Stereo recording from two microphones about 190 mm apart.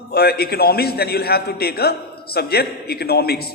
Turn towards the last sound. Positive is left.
turn(degrees=55)  # may be behind; listen again after turning